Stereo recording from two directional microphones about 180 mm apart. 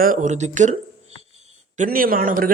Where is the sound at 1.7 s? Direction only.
50° right (ahead or behind).